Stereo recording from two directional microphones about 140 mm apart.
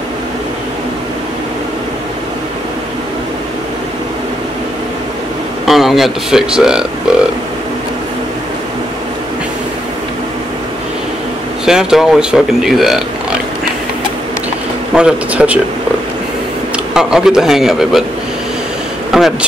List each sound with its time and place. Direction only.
5.7 s speech: centre (ahead or behind)
11.6 s speech: 5° right (ahead or behind)
15.0 s speech: 5° right (ahead or behind)
16.7 s speech: 5° right (ahead or behind)
19.1 s a sound: 5° right (ahead or behind)